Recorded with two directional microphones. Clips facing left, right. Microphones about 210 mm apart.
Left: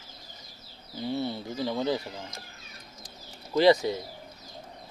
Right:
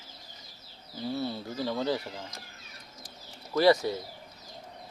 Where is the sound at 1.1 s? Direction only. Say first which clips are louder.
Left 2 dB; 20° left (ahead or behind).